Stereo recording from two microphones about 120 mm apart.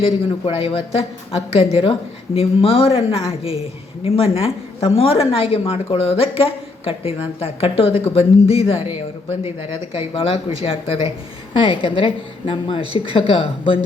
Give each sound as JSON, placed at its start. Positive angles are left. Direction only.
{"t": 0.4, "sound": "a woman's voice", "side_deg": 50}